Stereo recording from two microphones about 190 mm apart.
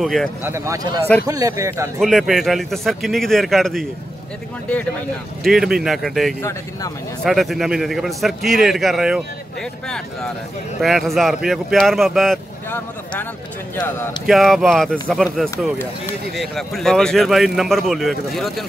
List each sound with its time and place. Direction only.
0.0 s a man's voice: centre (ahead or behind)
0.4 s speech: 15° right (ahead or behind)
2.0 s a man's voice: centre (ahead or behind)
5.4 s a man's voice: centre (ahead or behind)
10.8 s a man's voice: centre (ahead or behind)